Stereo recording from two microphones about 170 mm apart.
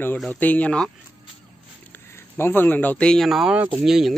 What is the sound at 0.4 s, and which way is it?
Speech, 10° left (ahead or behind).